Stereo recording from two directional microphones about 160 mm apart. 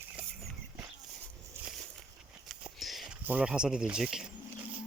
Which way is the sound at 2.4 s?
Centre (ahead or behind).